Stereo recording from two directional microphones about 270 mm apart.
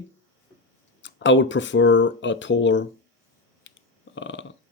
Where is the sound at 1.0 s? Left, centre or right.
Left.